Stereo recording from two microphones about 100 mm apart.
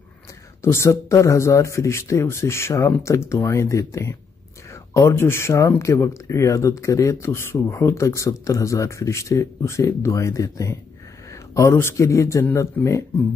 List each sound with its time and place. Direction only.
0.6 s speech: 25° left (ahead or behind)
12.8 s speech: 15° left (ahead or behind)